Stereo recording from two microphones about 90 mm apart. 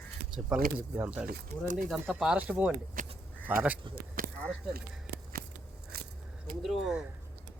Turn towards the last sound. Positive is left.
turn(degrees=-5)  # may be behind; listen again after turning